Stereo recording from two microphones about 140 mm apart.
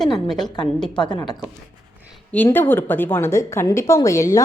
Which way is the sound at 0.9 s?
30° left (ahead or behind).